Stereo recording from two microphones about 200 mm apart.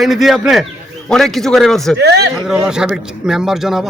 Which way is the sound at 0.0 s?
Centre (ahead or behind).